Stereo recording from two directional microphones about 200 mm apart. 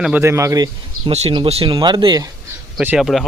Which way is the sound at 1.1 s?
30° right (ahead or behind).